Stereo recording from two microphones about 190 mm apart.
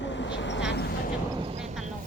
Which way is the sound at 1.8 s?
40° right (ahead or behind).